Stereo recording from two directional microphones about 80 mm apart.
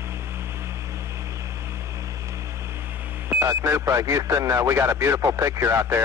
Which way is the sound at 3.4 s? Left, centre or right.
Right.